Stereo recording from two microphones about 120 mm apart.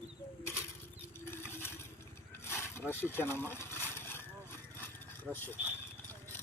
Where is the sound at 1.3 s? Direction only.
20° left (ahead or behind).